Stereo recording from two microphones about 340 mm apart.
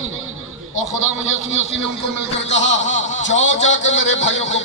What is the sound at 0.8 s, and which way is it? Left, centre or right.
Speech, right.